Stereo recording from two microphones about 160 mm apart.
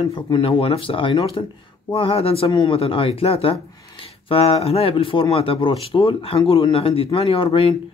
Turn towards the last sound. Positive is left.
turn(degrees=35)  # may be behind; listen again after turning